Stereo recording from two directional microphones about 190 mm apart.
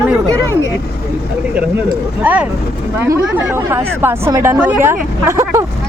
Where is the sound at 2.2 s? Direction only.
10° right (ahead or behind).